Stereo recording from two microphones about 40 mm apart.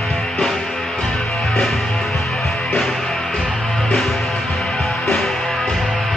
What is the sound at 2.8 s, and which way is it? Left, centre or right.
Music, centre.